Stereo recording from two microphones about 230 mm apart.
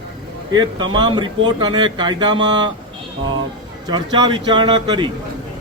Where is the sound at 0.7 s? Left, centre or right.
Centre.